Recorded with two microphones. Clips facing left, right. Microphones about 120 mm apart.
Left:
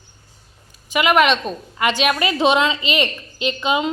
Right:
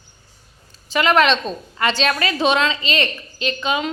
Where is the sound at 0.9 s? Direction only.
10° left (ahead or behind).